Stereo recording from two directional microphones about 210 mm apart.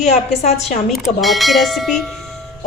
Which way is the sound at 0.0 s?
30° left (ahead or behind).